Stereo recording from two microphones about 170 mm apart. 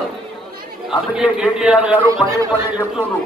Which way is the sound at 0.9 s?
5° right (ahead or behind).